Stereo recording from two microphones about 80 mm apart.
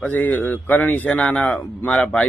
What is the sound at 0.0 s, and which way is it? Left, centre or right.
Speech, left.